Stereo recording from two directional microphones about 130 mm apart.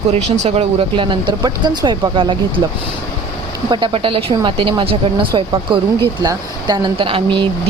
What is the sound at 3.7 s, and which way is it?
Speech, 40° right (ahead or behind).